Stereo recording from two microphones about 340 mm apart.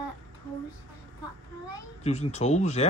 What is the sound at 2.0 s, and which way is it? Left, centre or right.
Speech, centre.